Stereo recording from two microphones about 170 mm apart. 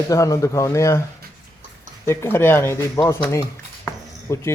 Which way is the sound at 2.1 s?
15° left (ahead or behind).